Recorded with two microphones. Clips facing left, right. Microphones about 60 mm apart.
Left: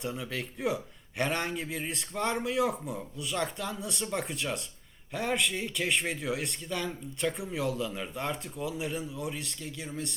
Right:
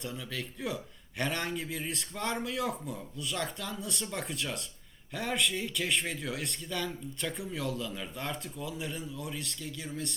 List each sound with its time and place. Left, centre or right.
0.0 s speech: centre
1.2 s a man's voice: centre